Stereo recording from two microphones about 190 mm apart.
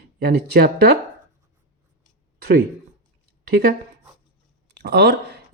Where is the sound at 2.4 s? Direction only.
55° right (ahead or behind).